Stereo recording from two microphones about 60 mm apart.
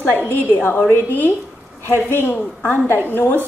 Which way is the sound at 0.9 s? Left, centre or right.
Left.